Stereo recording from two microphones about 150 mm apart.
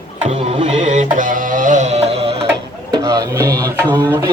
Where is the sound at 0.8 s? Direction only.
55° right (ahead or behind).